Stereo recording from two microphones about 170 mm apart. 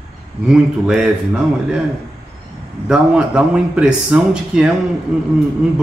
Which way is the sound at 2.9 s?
5° right (ahead or behind).